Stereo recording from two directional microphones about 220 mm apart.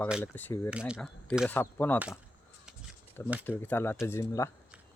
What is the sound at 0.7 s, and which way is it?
Speech, 5° right (ahead or behind).